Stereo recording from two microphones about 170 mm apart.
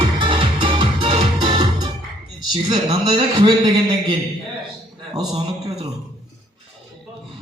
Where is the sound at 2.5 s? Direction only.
25° right (ahead or behind).